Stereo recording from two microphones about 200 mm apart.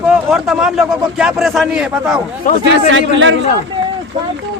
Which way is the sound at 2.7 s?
65° right (ahead or behind).